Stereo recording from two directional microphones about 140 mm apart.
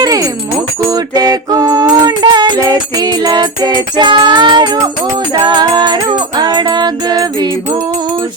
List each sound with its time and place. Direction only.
0.0 s music: 25° right (ahead or behind)